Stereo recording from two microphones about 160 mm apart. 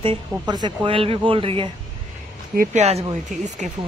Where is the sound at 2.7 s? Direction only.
45° right (ahead or behind).